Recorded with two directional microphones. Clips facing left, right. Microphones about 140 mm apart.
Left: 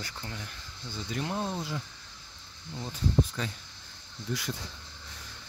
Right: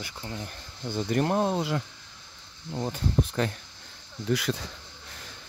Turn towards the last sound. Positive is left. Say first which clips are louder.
# right 8 dB
turn(degrees=-75)  # may be behind; listen again after turning